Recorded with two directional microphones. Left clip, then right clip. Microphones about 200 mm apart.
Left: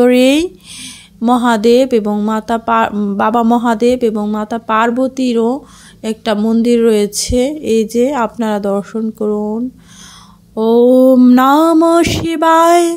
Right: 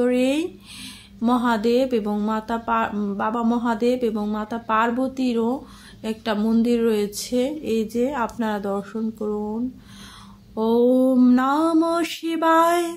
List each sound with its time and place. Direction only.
0.0 s speech: 45° left (ahead or behind)